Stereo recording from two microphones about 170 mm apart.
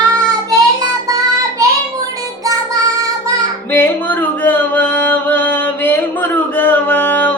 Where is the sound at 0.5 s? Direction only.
20° right (ahead or behind).